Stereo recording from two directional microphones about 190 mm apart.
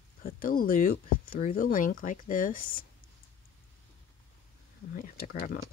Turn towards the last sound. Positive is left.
turn(degrees=50)  # may be behind; listen again after turning